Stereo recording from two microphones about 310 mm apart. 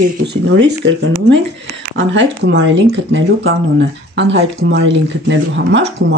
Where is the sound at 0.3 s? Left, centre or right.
Right.